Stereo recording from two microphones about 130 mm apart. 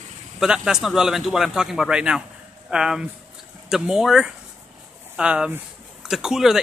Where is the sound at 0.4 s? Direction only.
5° right (ahead or behind).